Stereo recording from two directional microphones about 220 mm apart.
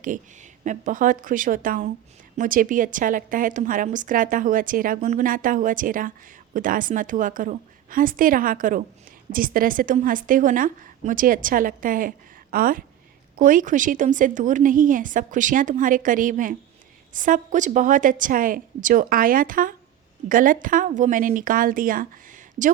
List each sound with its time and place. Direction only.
0.6 s a woman's voice: 35° right (ahead or behind)